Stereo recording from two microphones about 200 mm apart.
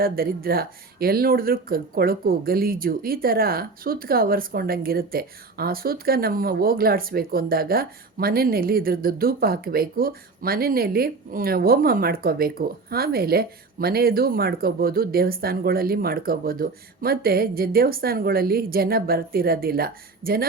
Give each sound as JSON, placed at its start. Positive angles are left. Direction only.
{"t": 0.0, "sound": "speech", "side_deg": -50}